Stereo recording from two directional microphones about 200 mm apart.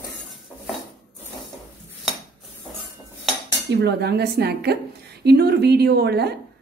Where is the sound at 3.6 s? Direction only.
55° right (ahead or behind).